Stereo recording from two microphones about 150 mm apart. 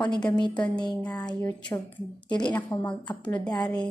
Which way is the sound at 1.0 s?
5° left (ahead or behind).